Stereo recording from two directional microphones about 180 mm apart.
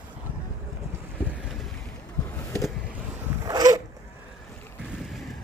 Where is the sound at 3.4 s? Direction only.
20° right (ahead or behind).